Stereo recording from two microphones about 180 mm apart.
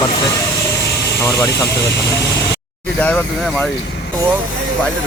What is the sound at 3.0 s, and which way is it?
Speech, 5° left (ahead or behind).